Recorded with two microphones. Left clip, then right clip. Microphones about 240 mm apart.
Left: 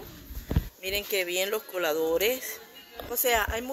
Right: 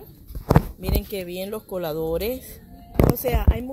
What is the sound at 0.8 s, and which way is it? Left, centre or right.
Speech, centre.